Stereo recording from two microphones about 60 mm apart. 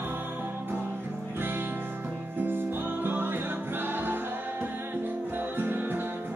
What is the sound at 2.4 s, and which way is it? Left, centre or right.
Music, right.